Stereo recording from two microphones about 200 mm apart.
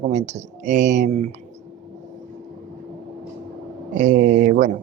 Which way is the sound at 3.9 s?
40° right (ahead or behind).